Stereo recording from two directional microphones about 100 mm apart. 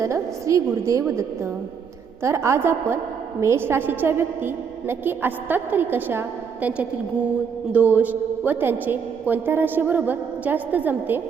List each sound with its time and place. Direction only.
0.0 s a woman's voice: 30° right (ahead or behind)